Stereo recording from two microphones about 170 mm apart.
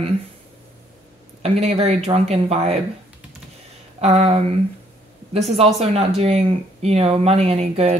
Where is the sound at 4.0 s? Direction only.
40° right (ahead or behind).